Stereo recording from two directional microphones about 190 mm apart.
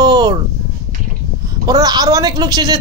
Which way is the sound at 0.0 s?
20° right (ahead or behind).